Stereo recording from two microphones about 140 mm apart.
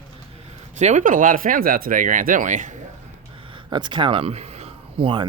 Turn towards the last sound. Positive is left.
turn(degrees=-40)  # may be behind; listen again after turning